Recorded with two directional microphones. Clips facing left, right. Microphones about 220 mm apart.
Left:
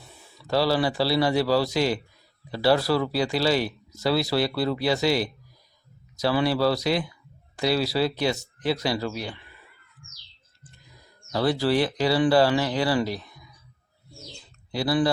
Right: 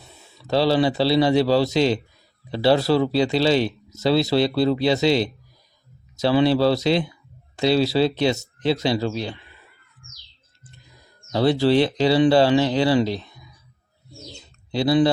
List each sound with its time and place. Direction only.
0.3 s speech: 25° right (ahead or behind)
11.3 s speech: 25° right (ahead or behind)
14.2 s bird: 20° right (ahead or behind)